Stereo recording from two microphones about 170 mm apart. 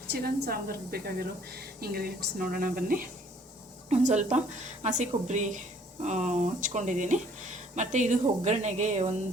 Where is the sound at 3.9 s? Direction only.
45° right (ahead or behind).